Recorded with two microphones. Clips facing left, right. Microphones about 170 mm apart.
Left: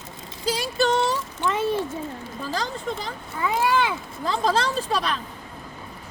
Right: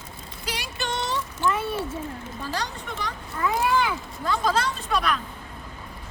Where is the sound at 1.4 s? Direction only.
25° left (ahead or behind).